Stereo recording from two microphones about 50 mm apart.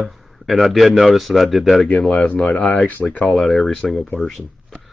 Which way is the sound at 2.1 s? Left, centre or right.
Left.